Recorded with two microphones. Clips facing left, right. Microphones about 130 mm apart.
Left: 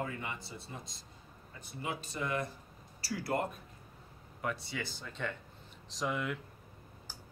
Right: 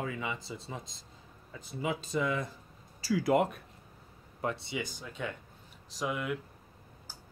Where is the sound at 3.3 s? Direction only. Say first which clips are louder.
Right 7 dB; 80° right.